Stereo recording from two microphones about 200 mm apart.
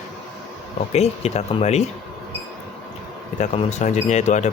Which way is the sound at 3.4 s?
35° left (ahead or behind).